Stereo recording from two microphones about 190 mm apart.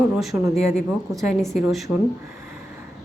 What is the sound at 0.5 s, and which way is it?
Speech, 35° left (ahead or behind).